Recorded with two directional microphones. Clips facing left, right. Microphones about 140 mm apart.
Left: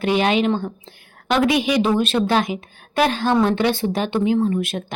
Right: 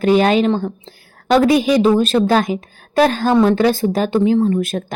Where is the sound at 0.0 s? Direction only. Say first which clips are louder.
Right 5 dB; 40° right (ahead or behind).